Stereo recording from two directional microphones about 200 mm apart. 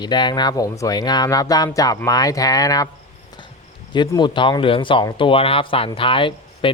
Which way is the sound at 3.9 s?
20° left (ahead or behind).